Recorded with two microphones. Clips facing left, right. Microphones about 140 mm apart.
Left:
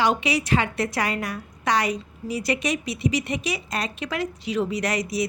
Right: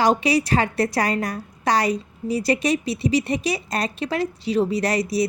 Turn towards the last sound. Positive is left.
turn(degrees=-35)  # may be behind; listen again after turning